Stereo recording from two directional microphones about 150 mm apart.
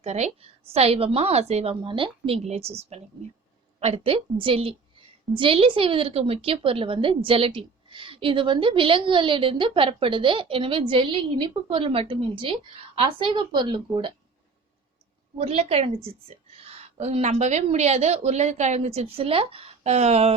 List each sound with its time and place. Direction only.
0.0 s a woman's voice: 45° right (ahead or behind)
15.4 s a woman's voice: 45° right (ahead or behind)